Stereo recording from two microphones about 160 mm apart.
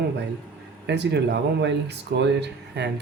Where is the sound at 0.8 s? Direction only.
90° right.